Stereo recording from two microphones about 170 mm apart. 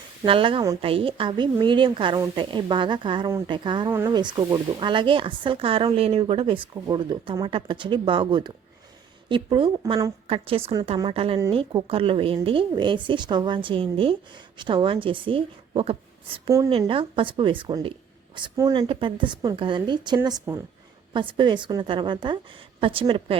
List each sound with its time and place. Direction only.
0.3 s a woman's voice: 30° right (ahead or behind)